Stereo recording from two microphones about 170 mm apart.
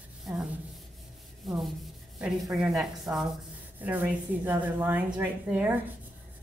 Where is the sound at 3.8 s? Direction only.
10° right (ahead or behind).